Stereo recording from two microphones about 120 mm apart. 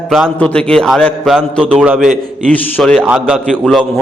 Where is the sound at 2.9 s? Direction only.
5° right (ahead or behind).